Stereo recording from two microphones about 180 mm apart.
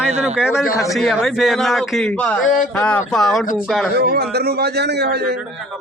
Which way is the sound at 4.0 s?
65° right (ahead or behind).